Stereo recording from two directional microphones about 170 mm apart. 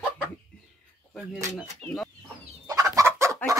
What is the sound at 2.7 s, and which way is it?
Fowl, 20° right (ahead or behind).